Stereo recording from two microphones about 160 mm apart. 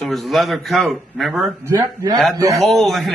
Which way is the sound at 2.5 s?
Centre (ahead or behind).